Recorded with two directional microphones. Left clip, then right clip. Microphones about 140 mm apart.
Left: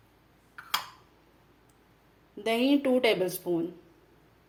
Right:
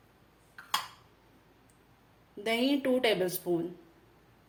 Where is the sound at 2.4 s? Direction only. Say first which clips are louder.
Left 3 dB; 15° left (ahead or behind).